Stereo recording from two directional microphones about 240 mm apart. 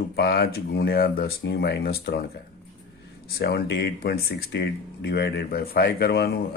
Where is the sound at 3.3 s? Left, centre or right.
Left.